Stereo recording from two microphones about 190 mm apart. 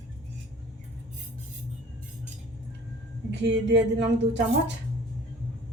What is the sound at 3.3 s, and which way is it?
A woman's voice, 70° right (ahead or behind).